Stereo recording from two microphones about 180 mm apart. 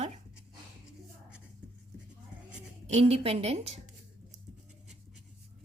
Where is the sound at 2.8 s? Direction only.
35° right (ahead or behind).